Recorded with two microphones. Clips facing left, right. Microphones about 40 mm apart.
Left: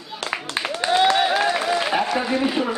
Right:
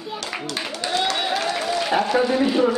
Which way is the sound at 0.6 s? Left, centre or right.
Left.